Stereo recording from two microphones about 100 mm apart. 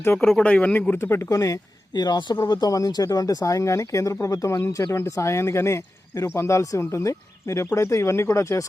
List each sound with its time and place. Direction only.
0.2 s a man's voice: 15° left (ahead or behind); by 8.6 s 30° left (ahead or behind)